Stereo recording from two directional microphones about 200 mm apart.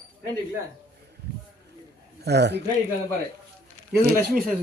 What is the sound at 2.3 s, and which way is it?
Speech, 55° right (ahead or behind).